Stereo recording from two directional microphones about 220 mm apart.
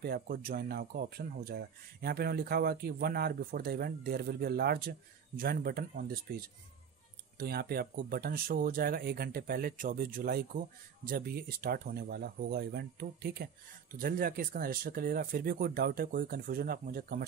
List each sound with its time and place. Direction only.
0.0 s speech: 45° right (ahead or behind)
7.3 s speech: 45° right (ahead or behind)